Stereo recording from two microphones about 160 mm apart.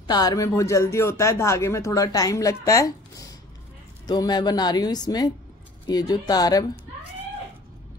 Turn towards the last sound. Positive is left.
turn(degrees=25)  # may be behind; listen again after turning